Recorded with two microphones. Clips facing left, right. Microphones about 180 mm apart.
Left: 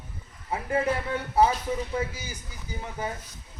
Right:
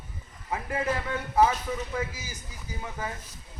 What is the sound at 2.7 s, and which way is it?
Speech, 30° left (ahead or behind).